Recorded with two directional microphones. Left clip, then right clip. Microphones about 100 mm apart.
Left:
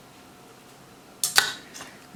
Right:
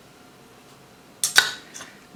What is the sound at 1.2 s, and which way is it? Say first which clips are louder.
Cutlery: right 3 dB; centre (ahead or behind).